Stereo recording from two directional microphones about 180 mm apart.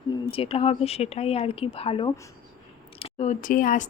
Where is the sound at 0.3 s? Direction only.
30° left (ahead or behind).